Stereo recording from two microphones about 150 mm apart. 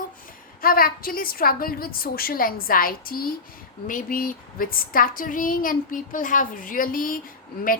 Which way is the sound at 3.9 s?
65° left (ahead or behind).